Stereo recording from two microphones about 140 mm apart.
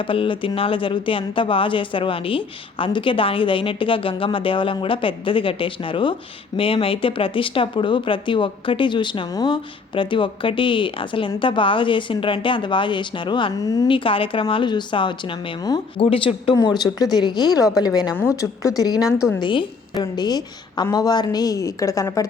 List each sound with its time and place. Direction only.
0.1 s speech: 40° left (ahead or behind)
13.8 s speech: 40° left (ahead or behind)
16.6 s speech: 30° left (ahead or behind)
18.9 s a woman's voice: 5° right (ahead or behind)
19.4 s speech: 35° left (ahead or behind)